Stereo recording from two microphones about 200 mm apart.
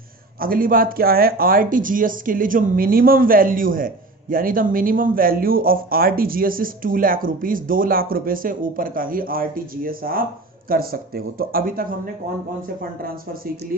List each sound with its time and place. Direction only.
0.3 s speech: 45° right (ahead or behind)
13.0 s speech: 45° right (ahead or behind)